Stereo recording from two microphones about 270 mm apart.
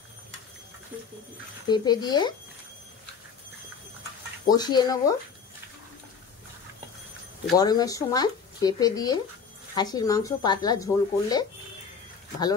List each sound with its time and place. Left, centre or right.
1.7 s speech: centre
4.5 s speech: centre
7.5 s speech: centre